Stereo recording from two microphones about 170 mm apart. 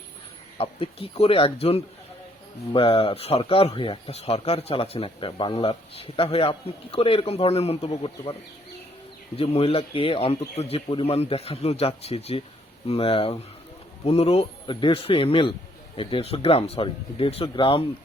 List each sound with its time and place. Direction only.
0.6 s speech: 35° left (ahead or behind)
9.4 s speech: 35° left (ahead or behind)